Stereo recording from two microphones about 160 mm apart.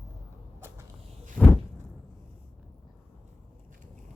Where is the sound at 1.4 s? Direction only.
5° left (ahead or behind).